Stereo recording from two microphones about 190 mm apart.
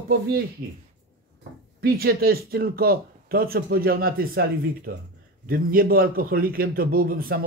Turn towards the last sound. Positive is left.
turn(degrees=-50)  # may be behind; listen again after turning